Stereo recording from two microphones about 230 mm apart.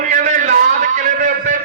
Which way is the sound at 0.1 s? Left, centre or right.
Right.